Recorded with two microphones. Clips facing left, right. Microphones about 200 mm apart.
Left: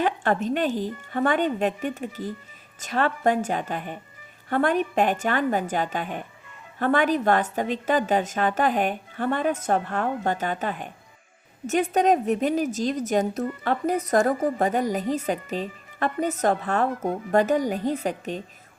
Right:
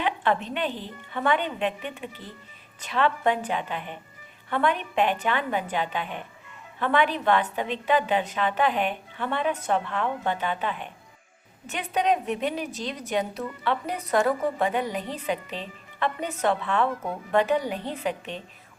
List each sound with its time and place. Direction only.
0.0 s a woman's voice: 45° left (ahead or behind)